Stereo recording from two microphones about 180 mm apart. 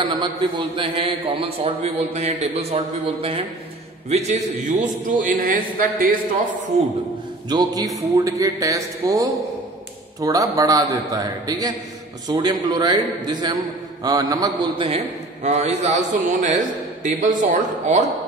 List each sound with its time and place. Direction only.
0.0 s a man's voice: 25° right (ahead or behind); by 6.5 s 50° right (ahead or behind)
7.4 s a man's voice: 20° right (ahead or behind)
15.4 s a man's voice: 40° right (ahead or behind)